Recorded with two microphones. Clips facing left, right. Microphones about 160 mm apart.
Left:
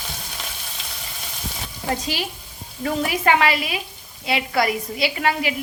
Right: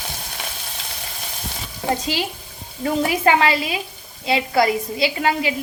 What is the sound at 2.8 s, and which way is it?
A woman's voice, 30° right (ahead or behind).